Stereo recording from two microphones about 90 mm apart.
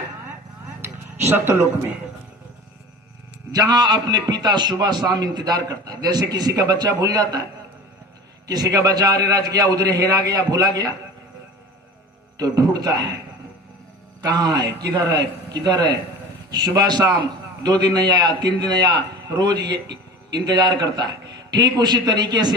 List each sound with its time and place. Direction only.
0.8 s a sound: 25° right (ahead or behind)
3.5 s a man's voice: 50° right (ahead or behind)
8.4 s a man's voice: 40° right (ahead or behind)
12.4 s a man's voice: 45° right (ahead or behind)
14.2 s a man's voice: 50° right (ahead or behind)